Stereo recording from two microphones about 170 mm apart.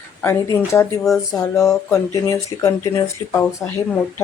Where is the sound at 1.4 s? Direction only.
20° left (ahead or behind).